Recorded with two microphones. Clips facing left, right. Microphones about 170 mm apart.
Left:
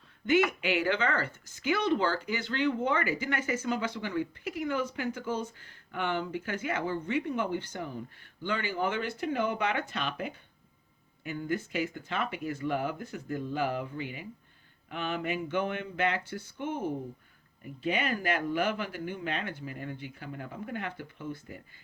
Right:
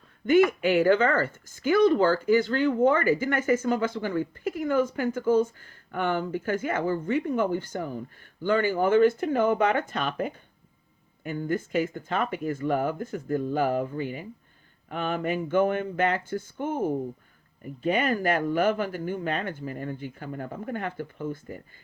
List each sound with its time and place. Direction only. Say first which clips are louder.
0.3 s speech: right 6 dB; 50° right (ahead or behind)